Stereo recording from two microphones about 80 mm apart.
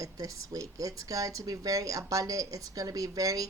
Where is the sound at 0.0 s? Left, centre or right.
Right.